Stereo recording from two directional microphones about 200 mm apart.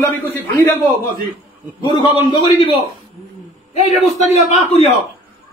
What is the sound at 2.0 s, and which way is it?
Speech, 20° left (ahead or behind).